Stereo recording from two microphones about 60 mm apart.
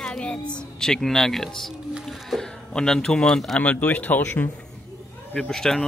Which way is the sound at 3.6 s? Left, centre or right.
Left.